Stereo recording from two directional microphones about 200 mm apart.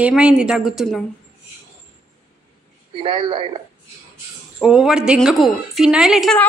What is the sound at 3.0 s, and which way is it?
Speech, 25° right (ahead or behind).